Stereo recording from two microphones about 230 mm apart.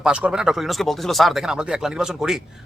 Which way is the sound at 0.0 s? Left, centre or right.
Centre.